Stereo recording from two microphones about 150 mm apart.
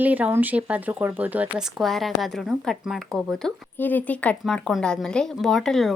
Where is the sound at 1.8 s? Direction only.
Centre (ahead or behind).